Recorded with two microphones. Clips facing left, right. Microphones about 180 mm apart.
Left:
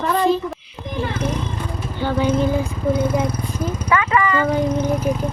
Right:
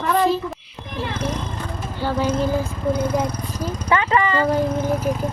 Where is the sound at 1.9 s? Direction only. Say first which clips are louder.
Left 2 dB; 5° right (ahead or behind).